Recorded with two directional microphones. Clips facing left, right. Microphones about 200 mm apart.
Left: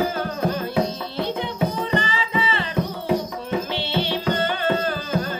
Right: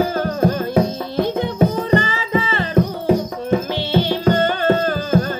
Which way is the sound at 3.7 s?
45° right (ahead or behind).